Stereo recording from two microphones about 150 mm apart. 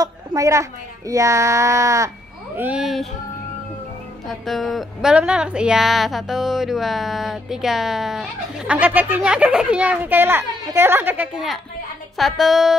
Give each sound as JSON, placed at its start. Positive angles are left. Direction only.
{"t": 0.0, "sound": "speech", "side_deg": -20}
{"t": 2.5, "sound": "a woman's voice", "side_deg": -10}
{"t": 4.3, "sound": "a woman's voice", "side_deg": 0}
{"t": 12.2, "sound": "a woman's voice", "side_deg": 0}